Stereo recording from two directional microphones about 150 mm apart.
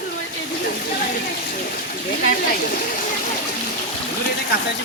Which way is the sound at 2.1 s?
75° left (ahead or behind).